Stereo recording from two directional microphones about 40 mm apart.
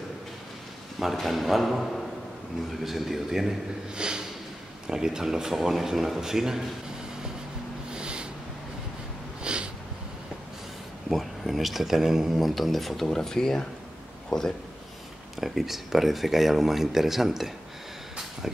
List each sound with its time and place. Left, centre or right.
0.9 s speech: centre
3.9 s speech: right
7.9 s a sound: right
9.4 s snort: right
11.1 s speech: centre
15.3 s speech: centre